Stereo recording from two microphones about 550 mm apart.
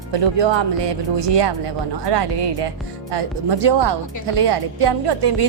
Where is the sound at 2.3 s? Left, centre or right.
Right.